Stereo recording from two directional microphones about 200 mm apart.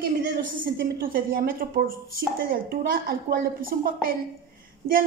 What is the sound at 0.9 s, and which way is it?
A woman's voice, 50° right (ahead or behind).